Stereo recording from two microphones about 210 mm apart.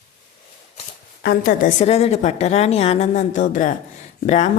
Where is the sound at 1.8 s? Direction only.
30° left (ahead or behind).